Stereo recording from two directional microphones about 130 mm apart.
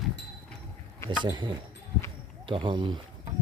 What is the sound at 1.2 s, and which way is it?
Speech, 35° right (ahead or behind).